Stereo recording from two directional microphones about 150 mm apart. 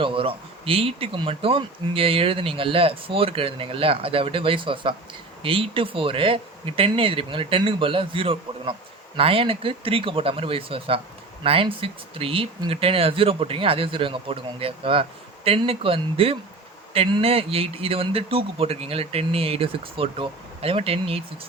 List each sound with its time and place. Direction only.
0.0 s speech: 35° right (ahead or behind)